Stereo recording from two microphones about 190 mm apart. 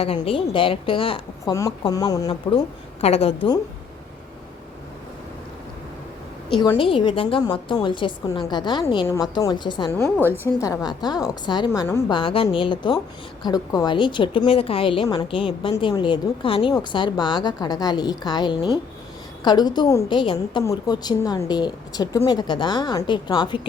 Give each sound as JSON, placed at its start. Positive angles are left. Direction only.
{"t": 0.0, "sound": "a woman's voice", "side_deg": 30}
{"t": 3.0, "sound": "a woman's voice", "side_deg": 30}
{"t": 6.6, "sound": "a woman's voice", "side_deg": 25}
{"t": 9.9, "sound": "a woman's voice", "side_deg": 10}
{"t": 12.1, "sound": "a woman's voice", "side_deg": 30}